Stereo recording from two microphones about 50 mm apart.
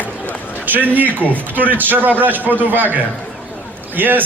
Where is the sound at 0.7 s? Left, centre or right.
Right.